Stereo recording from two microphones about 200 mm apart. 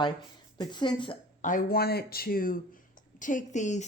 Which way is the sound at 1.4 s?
45° left (ahead or behind).